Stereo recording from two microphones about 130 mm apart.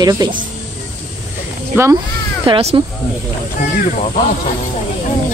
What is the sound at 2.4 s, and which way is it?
Speech, 45° right (ahead or behind).